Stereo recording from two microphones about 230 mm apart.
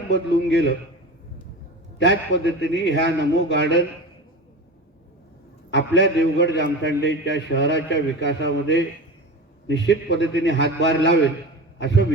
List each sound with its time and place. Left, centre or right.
0.1 s a man's voice: left
2.0 s a man's voice: left
5.7 s a man's voice: left
9.6 s a man's voice: left